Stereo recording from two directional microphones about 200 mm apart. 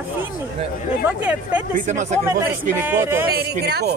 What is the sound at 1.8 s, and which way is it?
Speech, 35° right (ahead or behind).